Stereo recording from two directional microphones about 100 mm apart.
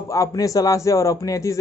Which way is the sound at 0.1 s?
35° left (ahead or behind).